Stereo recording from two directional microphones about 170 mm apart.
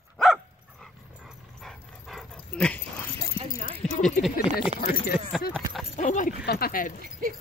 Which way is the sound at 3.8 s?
5° left (ahead or behind).